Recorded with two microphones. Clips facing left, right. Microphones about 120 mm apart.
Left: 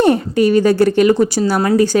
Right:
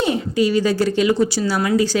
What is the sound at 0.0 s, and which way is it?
A woman's voice, 55° left (ahead or behind).